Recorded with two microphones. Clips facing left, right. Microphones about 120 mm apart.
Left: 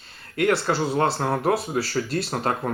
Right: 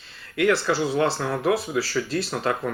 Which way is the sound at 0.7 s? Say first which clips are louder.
Even; 45° left (ahead or behind).